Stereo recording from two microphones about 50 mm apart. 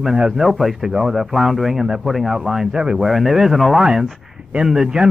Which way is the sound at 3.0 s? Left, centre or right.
Centre.